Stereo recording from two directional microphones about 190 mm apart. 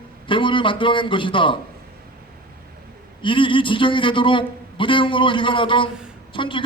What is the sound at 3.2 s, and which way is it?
A man's voice, 25° left (ahead or behind).